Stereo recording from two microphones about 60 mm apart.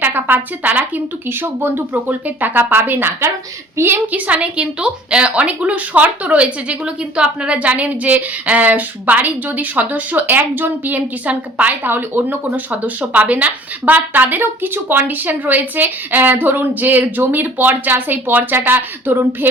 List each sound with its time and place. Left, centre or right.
0.0 s a woman's voice: right